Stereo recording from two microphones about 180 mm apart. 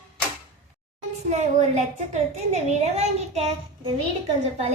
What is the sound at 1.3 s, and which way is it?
A woman's voice, 40° right (ahead or behind).